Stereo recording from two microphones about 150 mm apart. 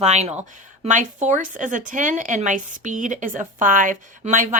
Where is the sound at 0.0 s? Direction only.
45° right (ahead or behind).